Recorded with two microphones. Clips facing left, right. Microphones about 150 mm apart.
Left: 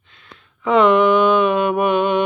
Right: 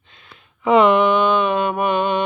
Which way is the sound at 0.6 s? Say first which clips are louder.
Even; 5° right (ahead or behind).